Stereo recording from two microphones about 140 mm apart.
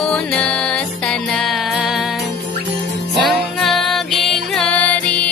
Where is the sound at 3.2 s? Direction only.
Centre (ahead or behind).